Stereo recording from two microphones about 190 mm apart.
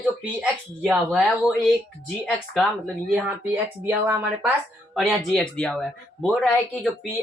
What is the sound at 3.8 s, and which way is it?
Speech, 10° right (ahead or behind).